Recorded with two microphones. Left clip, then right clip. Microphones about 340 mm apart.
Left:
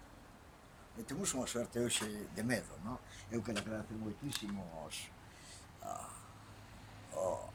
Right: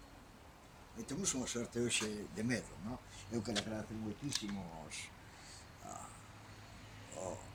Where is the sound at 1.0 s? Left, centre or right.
Centre.